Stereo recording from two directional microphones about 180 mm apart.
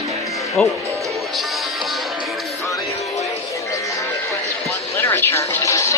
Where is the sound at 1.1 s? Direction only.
Centre (ahead or behind).